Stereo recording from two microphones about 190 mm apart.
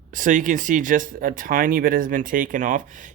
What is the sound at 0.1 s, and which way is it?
Speech, 45° right (ahead or behind).